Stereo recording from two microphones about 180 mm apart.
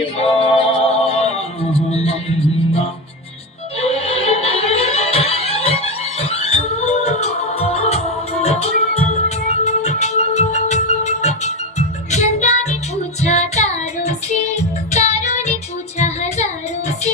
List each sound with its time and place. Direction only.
0.0 s music: 30° left (ahead or behind)
3.8 s music: 35° left (ahead or behind)
16.0 s child singing: 40° left (ahead or behind)